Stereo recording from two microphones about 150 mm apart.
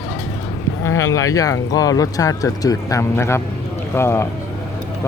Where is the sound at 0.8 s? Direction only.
20° left (ahead or behind).